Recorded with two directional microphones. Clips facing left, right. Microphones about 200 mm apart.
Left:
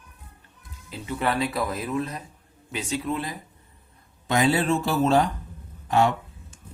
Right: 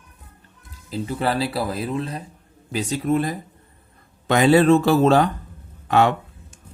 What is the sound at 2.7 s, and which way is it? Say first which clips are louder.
Speech: right 7 dB; 40° right (ahead or behind).